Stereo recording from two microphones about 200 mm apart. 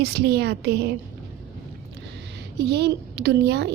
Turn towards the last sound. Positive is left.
turn(degrees=-55)  # may be behind; listen again after turning